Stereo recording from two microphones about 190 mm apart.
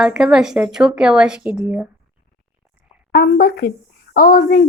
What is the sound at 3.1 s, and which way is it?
A woman's voice, 50° left (ahead or behind).